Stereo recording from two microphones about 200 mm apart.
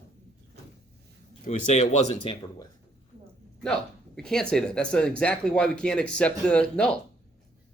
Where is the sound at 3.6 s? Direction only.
5° left (ahead or behind).